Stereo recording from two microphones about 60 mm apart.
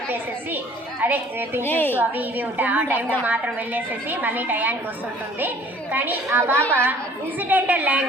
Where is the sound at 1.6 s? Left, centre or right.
Left.